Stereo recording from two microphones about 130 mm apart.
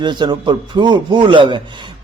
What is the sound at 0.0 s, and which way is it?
Speech, 35° right (ahead or behind).